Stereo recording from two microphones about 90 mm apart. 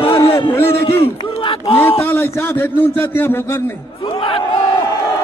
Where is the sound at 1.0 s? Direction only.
90° left.